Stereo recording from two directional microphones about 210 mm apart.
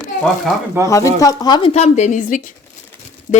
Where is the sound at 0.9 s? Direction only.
15° left (ahead or behind).